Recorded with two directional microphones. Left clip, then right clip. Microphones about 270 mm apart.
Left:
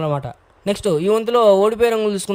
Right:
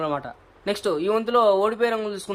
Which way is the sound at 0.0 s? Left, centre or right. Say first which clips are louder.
Left 4 dB; left.